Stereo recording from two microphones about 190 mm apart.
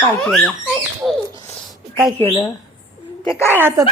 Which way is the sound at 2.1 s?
20° left (ahead or behind).